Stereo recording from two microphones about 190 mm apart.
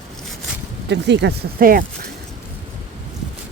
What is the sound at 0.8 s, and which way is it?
Speech, 65° right (ahead or behind).